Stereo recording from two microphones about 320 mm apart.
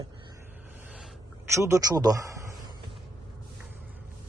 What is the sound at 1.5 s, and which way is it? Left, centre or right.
Speech, centre.